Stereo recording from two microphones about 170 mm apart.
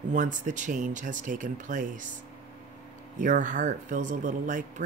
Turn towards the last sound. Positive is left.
turn(degrees=-50)  # may be behind; listen again after turning